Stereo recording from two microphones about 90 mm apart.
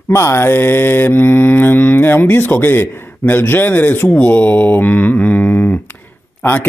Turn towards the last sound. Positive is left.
turn(degrees=20)  # may be behind; listen again after turning